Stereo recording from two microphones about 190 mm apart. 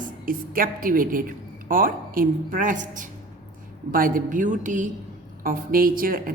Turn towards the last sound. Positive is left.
turn(degrees=-50)  # may be behind; listen again after turning